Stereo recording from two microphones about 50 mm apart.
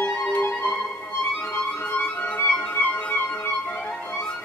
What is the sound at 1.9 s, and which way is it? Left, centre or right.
Music, left.